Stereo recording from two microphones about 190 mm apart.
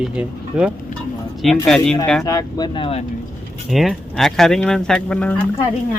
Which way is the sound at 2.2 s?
20° left (ahead or behind).